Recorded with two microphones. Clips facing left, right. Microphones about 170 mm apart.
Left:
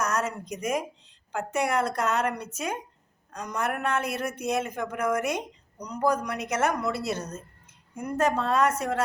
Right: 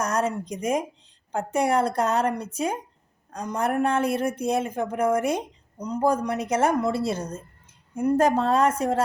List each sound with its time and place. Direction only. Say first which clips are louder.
0.0 s a woman's voice: right 3 dB; 30° right (ahead or behind)